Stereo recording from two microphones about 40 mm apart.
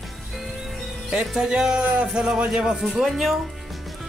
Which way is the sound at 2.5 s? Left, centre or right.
Centre.